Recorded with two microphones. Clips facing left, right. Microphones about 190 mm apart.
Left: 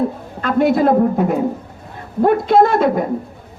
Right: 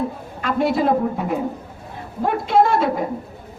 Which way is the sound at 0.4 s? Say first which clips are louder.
Left 5 dB; 50° left (ahead or behind).